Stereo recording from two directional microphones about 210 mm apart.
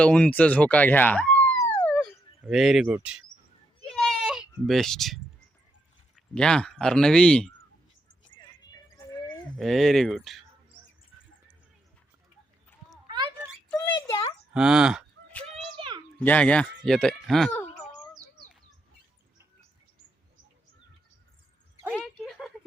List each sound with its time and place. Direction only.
0.0 s speech: 5° left (ahead or behind)
3.9 s baby cry: centre (ahead or behind)
6.1 s speech: 5° left (ahead or behind)
9.0 s livestock: 15° left (ahead or behind)
9.6 s speech: centre (ahead or behind)
13.7 s a sound: 20° left (ahead or behind)
14.5 s a sound: 5° right (ahead or behind)
16.1 s speech: 5° left (ahead or behind)
21.8 s a sound: centre (ahead or behind)